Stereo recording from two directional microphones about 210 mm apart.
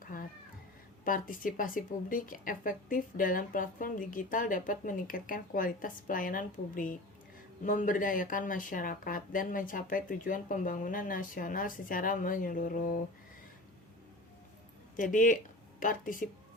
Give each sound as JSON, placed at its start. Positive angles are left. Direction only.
{"t": 0.0, "sound": "cat", "side_deg": 40}
{"t": 1.0, "sound": "a woman's voice", "side_deg": 40}
{"t": 14.9, "sound": "a woman's voice", "side_deg": 40}